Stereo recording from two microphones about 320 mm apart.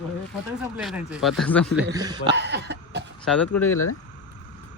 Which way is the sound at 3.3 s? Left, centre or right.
Centre.